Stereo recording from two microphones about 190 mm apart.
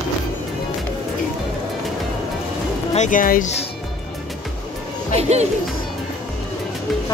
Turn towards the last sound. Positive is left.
turn(degrees=-35)  # may be behind; listen again after turning